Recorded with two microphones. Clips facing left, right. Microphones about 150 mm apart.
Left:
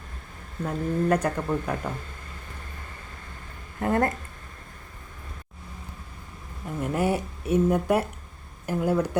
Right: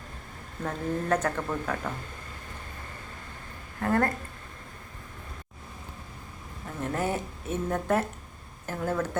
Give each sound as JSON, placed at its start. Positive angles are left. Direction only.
{"t": 0.6, "sound": "speech", "side_deg": 10}
{"t": 3.8, "sound": "speech", "side_deg": 20}
{"t": 6.8, "sound": "speech", "side_deg": 10}